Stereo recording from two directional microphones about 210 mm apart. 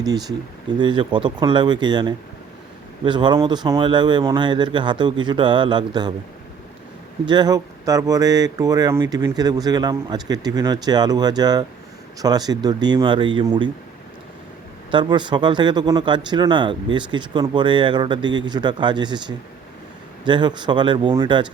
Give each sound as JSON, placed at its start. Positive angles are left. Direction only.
{"t": 0.0, "sound": "speech", "side_deg": -20}
{"t": 7.3, "sound": "speech", "side_deg": -20}
{"t": 14.8, "sound": "speech", "side_deg": -20}